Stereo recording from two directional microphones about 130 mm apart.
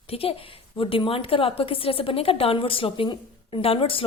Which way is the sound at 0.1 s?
45° left (ahead or behind).